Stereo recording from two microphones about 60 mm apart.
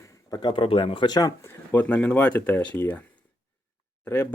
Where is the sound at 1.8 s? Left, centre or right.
Left.